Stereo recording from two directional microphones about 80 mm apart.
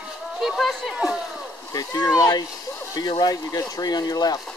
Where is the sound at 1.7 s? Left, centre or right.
Left.